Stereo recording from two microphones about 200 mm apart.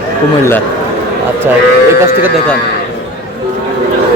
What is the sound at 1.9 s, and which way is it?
Speech, 15° right (ahead or behind).